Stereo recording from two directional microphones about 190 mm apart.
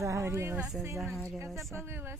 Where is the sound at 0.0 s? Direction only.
15° right (ahead or behind); by 1.7 s centre (ahead or behind).